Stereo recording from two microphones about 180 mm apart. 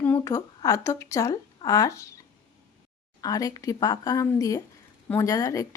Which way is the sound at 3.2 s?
20° left (ahead or behind).